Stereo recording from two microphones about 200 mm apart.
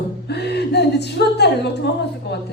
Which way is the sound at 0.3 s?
55° left (ahead or behind).